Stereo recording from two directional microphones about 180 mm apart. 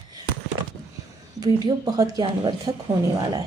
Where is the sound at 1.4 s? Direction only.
20° right (ahead or behind).